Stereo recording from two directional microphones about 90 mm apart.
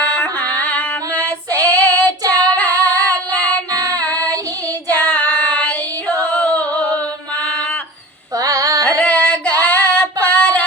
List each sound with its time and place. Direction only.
0.0 s female singing: 15° left (ahead or behind)
2.6 s child singing: 15° left (ahead or behind)
4.0 s child singing: 40° right (ahead or behind)
4.9 s female singing: 15° left (ahead or behind)
8.4 s carnatic music: 40° right (ahead or behind)
8.8 s female singing: 15° left (ahead or behind)